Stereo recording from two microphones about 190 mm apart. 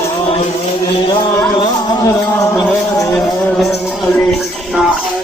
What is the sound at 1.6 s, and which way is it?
Music, 20° left (ahead or behind).